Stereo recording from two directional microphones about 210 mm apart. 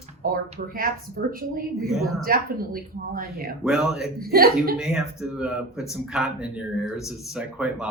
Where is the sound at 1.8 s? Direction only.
Centre (ahead or behind).